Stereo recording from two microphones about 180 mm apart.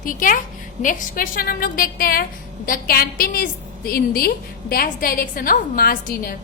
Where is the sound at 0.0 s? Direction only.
50° left (ahead or behind).